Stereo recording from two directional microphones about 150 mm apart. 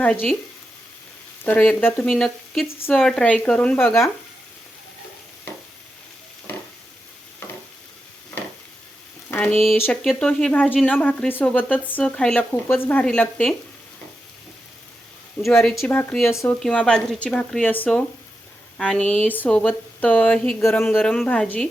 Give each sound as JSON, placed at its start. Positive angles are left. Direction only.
{"t": 0.0, "sound": "speech", "side_deg": 5}
{"t": 1.5, "sound": "speech", "side_deg": 10}
{"t": 9.3, "sound": "speech", "side_deg": 5}
{"t": 15.8, "sound": "speech", "side_deg": 15}
{"t": 16.1, "sound": "a woman's voice", "side_deg": 0}
{"t": 21.0, "sound": "a woman's voice", "side_deg": 5}